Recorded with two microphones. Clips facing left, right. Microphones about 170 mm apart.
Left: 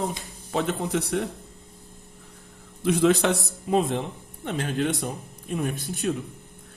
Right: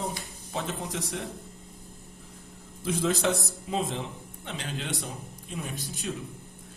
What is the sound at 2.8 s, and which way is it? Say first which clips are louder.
A man's voice: left 6 dB; 70° left (ahead or behind).